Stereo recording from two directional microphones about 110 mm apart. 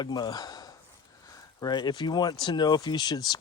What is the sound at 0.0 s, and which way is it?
Speech, 40° left (ahead or behind).